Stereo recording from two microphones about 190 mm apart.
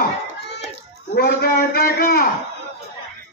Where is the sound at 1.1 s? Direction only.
55° left (ahead or behind).